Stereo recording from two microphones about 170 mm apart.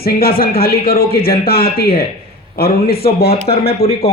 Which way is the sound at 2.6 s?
65° left (ahead or behind).